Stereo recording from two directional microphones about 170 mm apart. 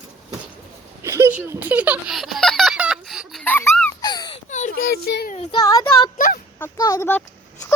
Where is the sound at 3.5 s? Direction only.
10° left (ahead or behind).